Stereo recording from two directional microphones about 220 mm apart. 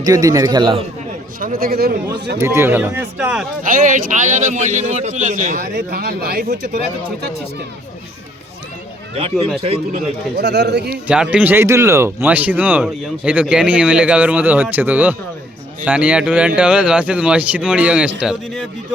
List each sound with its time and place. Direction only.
0.0 s speech: 15° right (ahead or behind)
1.4 s speech: 40° right (ahead or behind)
2.4 s speech: 10° right (ahead or behind)
3.6 s a man's voice: 35° right (ahead or behind)
9.1 s a man's voice: 25° right (ahead or behind)
10.3 s speech: 50° right (ahead or behind)
11.1 s a man's voice: 5° right (ahead or behind)